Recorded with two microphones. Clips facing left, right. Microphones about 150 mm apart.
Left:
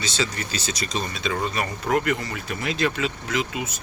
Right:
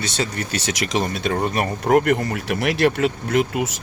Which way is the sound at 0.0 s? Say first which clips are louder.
Right 3 dB; 60° right (ahead or behind).